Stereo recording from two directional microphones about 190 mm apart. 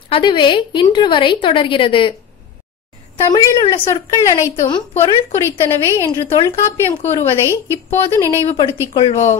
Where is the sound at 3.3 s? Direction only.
20° left (ahead or behind).